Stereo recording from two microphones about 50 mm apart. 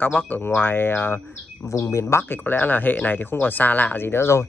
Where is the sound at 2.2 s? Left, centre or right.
Left.